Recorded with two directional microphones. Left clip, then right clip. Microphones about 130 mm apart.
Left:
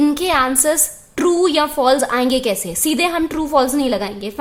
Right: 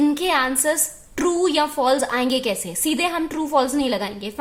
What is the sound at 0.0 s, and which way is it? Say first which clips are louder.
A woman's voice: left 4 dB; 20° left (ahead or behind).